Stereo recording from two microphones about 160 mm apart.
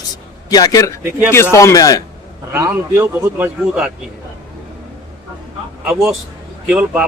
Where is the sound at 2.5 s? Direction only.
15° right (ahead or behind).